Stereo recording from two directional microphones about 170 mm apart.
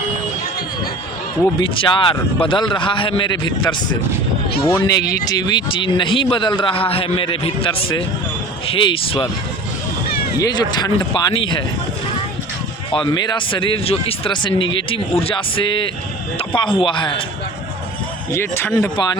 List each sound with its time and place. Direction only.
1.6 s a man's voice: 30° left (ahead or behind)
10.3 s a man's voice: 25° left (ahead or behind)
12.9 s a man's voice: 30° left (ahead or behind)
18.3 s speech: 15° left (ahead or behind)
18.7 s a man's voice: 25° left (ahead or behind)